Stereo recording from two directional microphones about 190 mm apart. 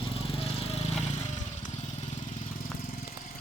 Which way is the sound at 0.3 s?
30° left (ahead or behind).